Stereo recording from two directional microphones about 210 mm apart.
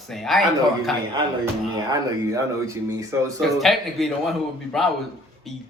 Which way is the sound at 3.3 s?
Centre (ahead or behind).